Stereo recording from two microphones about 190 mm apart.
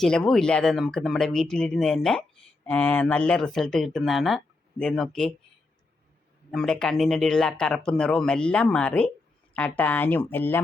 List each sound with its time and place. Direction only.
0.0 s speech: centre (ahead or behind)
6.5 s speech: centre (ahead or behind)